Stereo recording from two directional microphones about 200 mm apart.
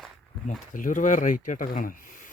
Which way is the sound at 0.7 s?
40° left (ahead or behind).